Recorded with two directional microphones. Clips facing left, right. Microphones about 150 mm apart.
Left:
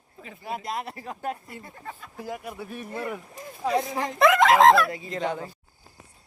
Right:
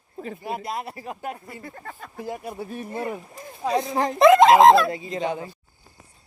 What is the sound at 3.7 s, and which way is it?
Speech, 20° right (ahead or behind).